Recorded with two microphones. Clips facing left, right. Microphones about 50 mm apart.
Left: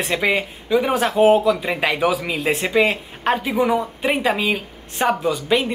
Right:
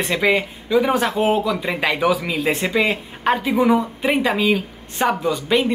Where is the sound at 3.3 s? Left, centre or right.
Centre.